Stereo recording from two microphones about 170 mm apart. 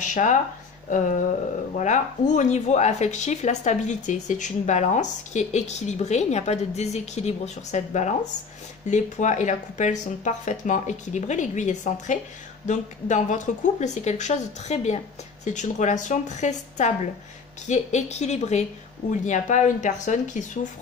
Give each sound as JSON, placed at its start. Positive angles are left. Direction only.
{"t": 0.0, "sound": "speech", "side_deg": 45}